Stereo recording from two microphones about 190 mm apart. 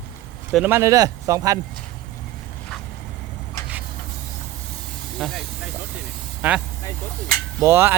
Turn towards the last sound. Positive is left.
turn(degrees=-15)  # may be behind; listen again after turning